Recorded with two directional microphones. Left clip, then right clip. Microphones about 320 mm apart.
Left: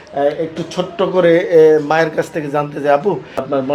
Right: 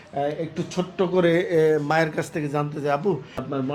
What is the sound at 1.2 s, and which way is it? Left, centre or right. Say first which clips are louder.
Speech: left 11 dB; right.